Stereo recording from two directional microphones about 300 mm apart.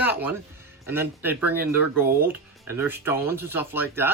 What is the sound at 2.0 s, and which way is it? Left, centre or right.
Speech, right.